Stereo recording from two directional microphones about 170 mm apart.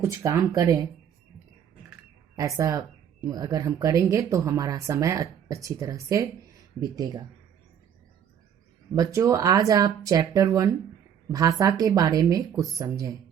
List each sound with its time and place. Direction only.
0.0 s speech: 15° right (ahead or behind)
2.3 s speech: 20° right (ahead or behind)
9.0 s speech: 20° right (ahead or behind)